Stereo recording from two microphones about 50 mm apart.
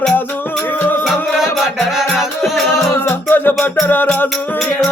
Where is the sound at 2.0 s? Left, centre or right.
Centre.